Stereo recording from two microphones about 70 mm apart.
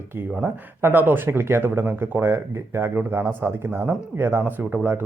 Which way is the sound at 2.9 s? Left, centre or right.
Right.